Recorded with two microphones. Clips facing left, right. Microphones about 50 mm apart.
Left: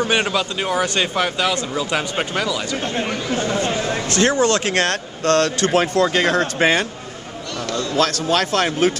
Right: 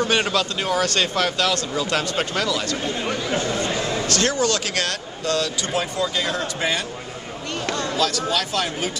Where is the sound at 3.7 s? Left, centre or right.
Left.